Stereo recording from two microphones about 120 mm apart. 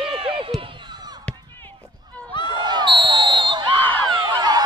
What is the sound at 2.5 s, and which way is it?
Basketball bounce, 35° right (ahead or behind).